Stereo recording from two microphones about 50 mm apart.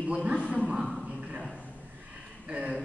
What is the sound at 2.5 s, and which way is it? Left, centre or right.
Speech, right.